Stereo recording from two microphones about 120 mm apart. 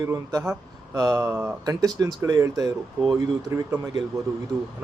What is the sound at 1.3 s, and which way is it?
Speech, 15° right (ahead or behind).